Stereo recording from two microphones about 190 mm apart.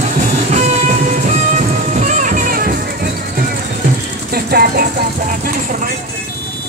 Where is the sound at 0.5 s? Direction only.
40° right (ahead or behind).